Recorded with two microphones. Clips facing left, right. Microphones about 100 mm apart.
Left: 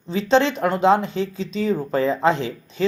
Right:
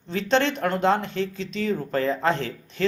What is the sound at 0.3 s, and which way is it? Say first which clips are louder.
Speech: left 4 dB; 5° left (ahead or behind).